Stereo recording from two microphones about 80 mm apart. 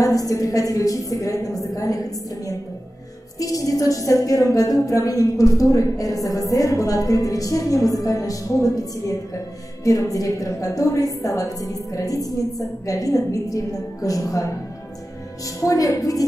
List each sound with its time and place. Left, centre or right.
0.0 s a woman's voice: left